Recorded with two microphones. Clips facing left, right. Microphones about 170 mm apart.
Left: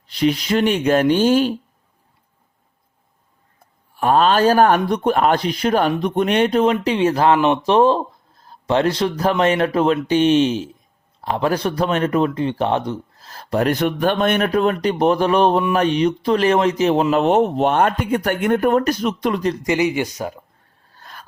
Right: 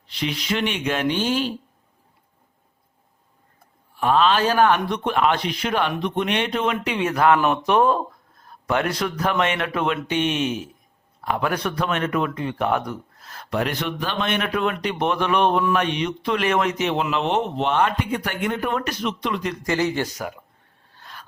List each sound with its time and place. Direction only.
0.1 s speech: 45° left (ahead or behind)
4.0 s speech: 45° left (ahead or behind)
19.6 s speech: 15° left (ahead or behind)
20.9 s a sound: 45° left (ahead or behind)